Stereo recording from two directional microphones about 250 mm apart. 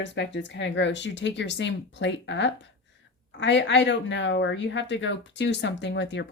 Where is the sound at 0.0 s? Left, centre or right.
Left.